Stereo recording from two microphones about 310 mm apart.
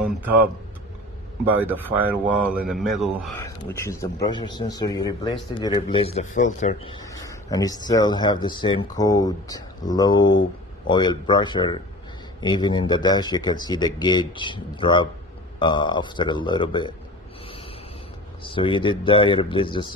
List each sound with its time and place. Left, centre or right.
1.6 s a man's voice: centre
18.4 s a man's voice: centre